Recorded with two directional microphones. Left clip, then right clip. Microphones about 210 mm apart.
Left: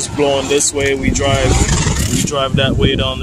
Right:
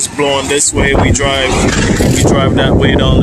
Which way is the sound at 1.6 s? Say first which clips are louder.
Right 6 dB; 60° left (ahead or behind).